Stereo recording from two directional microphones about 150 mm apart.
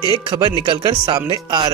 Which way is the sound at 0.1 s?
25° right (ahead or behind).